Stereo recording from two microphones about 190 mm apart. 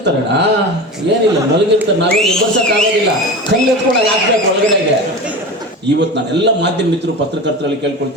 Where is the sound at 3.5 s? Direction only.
75° right (ahead or behind).